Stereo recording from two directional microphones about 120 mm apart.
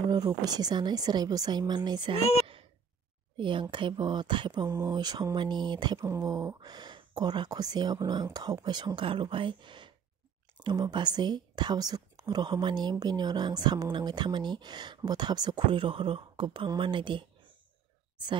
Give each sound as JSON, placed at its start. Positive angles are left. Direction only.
{"t": 0.5, "sound": "speech", "side_deg": -35}
{"t": 2.1, "sound": "a woman's voice", "side_deg": 60}
{"t": 3.3, "sound": "speech", "side_deg": -45}
{"t": 4.6, "sound": "speech", "side_deg": -25}
{"t": 5.9, "sound": "speech", "side_deg": -25}